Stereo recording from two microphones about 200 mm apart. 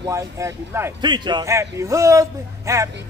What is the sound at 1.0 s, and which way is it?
Speech, 20° right (ahead or behind).